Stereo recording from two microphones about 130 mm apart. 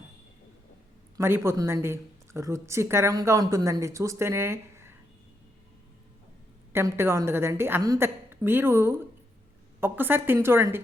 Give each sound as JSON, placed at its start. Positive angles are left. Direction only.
{"t": 1.1, "sound": "speech", "side_deg": -20}
{"t": 6.7, "sound": "a woman's voice", "side_deg": -20}